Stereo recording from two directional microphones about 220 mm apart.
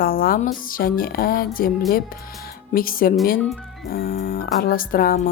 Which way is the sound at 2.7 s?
40° left (ahead or behind).